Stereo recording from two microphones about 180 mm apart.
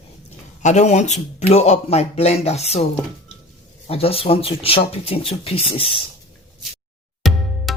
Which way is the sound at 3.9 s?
30° left (ahead or behind).